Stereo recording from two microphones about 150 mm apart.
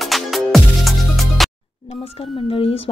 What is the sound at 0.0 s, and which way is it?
Music, centre (ahead or behind).